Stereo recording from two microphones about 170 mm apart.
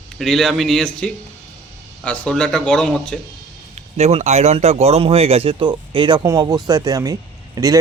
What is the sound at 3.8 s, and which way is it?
Speech, 40° right (ahead or behind).